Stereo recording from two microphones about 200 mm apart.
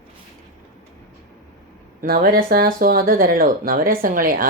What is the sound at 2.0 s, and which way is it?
Speech, 45° right (ahead or behind).